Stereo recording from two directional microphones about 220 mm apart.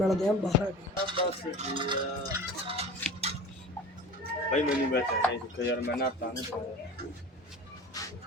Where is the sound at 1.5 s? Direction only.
20° right (ahead or behind).